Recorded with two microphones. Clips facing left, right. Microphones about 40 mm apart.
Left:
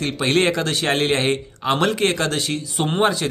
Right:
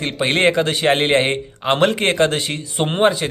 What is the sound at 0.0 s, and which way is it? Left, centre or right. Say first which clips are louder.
Speech: right 2 dB; centre.